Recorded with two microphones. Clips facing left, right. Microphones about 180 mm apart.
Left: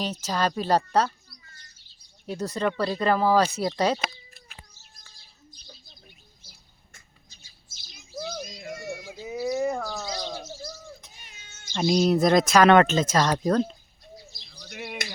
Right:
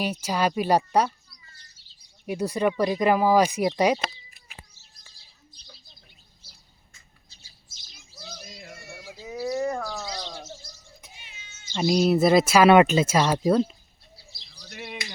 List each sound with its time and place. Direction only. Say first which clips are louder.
0.0 s speech: right 2 dB; 10° right (ahead or behind)
2.2 s speech: right 3 dB; 10° right (ahead or behind)
4.7 s bird: left 3 dB; 30° right (ahead or behind)
8.7 s a sound: left 9 dB; 20° left (ahead or behind)
9.4 s bird: left 1 dB; 5° left (ahead or behind)
11.1 s a sound: right 1 dB; 45° left (ahead or behind)
11.7 s speech: even; 5° right (ahead or behind)
14.5 s bird: left 1 dB; 5° left (ahead or behind)